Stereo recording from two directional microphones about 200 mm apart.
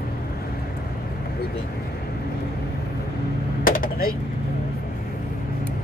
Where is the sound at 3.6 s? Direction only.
45° left (ahead or behind).